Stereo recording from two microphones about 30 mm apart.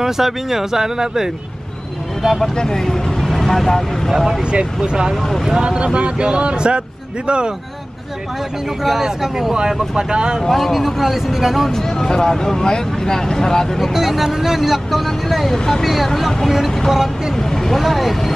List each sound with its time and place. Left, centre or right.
0.0 s speech: centre
2.5 s speech: centre
3.1 s speech: centre
4.1 s speech: centre
4.4 s speech: right
8.8 s speech: centre; by 10.4 s right
10.5 s speech: centre
11.7 s speech: centre
13.9 s speech: centre
17.4 s speech: centre
17.7 s speech: centre